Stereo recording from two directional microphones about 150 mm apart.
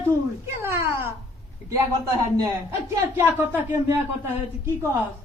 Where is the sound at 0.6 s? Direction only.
15° right (ahead or behind).